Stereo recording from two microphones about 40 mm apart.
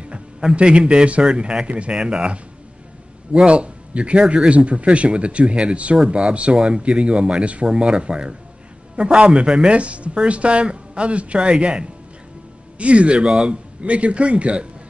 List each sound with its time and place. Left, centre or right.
0.0 s a man's voice: right
13.8 s speech: right